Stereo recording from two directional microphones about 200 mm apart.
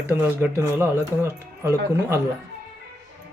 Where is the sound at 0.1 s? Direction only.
10° right (ahead or behind).